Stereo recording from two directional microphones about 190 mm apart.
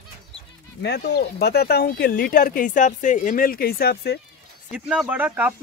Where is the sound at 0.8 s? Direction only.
60° left (ahead or behind).